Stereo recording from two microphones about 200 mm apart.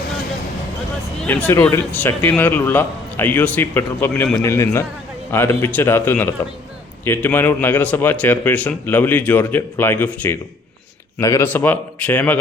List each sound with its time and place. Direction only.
1.2 s a man's voice: 10° left (ahead or behind)
11.2 s a man's voice: 15° left (ahead or behind)